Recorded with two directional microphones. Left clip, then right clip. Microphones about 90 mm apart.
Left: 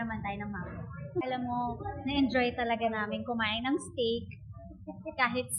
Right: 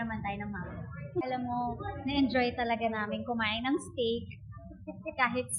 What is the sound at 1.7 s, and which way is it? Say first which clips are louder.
Speech: even; 15° right (ahead or behind).